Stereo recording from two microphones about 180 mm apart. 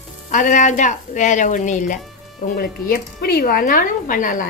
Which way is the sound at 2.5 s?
60° left (ahead or behind).